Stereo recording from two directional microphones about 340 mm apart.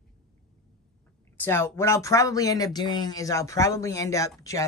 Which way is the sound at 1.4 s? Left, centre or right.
Centre.